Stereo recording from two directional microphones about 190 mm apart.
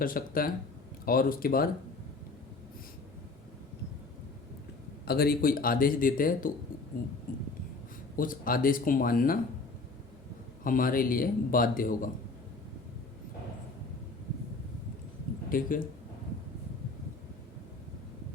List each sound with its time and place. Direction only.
0.0 s a man's voice: 50° left (ahead or behind)
5.0 s a man's voice: 55° left (ahead or behind)
7.3 s a sound: 50° left (ahead or behind)
8.1 s a man's voice: 45° left (ahead or behind)
10.6 s a man's voice: 45° left (ahead or behind)
15.4 s speech: 45° left (ahead or behind)